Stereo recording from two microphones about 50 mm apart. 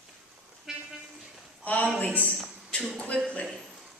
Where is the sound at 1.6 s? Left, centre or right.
Left.